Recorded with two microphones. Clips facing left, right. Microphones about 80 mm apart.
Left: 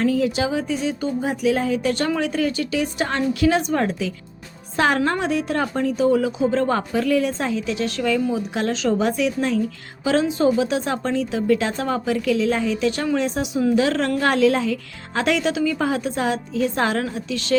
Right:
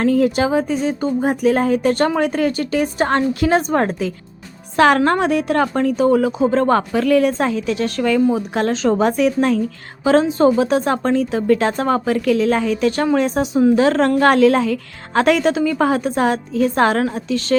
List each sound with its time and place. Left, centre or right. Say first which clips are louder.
0.0 s speech: right 4 dB; right
4.8 s a woman's voice: right 6 dB; right
6.7 s a woman's voice: right 5 dB; right
14.2 s speech: right 4 dB; right